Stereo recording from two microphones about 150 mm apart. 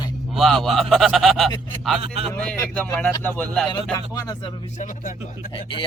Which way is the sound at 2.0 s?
45° right (ahead or behind).